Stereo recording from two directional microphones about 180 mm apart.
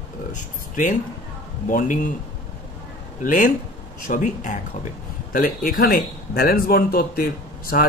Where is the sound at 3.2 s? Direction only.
50° left (ahead or behind).